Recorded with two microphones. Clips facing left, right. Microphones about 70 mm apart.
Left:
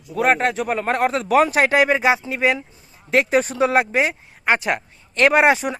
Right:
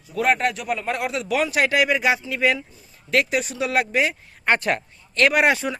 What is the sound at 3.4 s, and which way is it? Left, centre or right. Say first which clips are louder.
Speech: left 5 dB; left.